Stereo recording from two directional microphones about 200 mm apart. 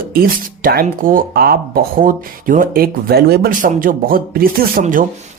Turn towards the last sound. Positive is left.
turn(degrees=-45)  # may be behind; listen again after turning